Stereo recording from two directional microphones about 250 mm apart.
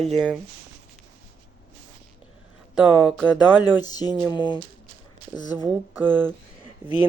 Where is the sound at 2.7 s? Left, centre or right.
Centre.